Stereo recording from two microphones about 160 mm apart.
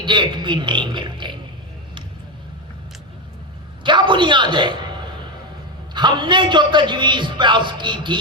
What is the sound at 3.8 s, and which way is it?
Speech, 30° right (ahead or behind).